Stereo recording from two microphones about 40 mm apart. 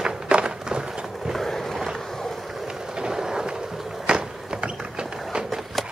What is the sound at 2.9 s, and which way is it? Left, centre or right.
Train, centre.